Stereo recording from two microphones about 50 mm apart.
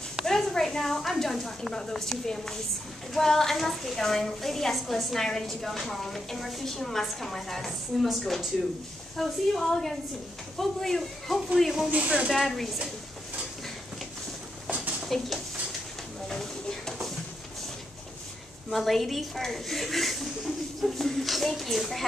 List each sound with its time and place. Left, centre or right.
0.2 s a woman's voice: centre
11.9 s speech: right
12.3 s a woman's voice: centre
15.0 s a sound: centre
16.3 s a sound: centre
18.7 s a woman's voice: centre